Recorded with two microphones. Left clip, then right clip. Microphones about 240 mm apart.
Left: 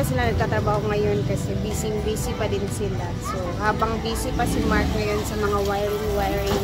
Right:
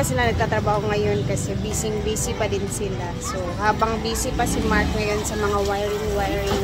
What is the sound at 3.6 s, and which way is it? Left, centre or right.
A woman's voice, centre.